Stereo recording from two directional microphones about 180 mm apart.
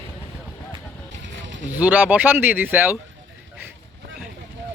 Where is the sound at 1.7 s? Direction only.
10° right (ahead or behind).